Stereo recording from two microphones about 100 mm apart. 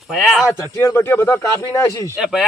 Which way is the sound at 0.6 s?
25° left (ahead or behind).